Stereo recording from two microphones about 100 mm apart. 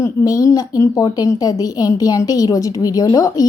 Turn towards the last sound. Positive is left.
turn(degrees=40)  # may be behind; listen again after turning